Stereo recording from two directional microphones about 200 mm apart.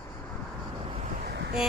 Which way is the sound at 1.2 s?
55° right (ahead or behind).